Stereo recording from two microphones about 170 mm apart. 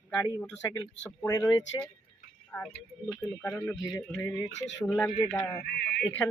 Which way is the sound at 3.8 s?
20° left (ahead or behind).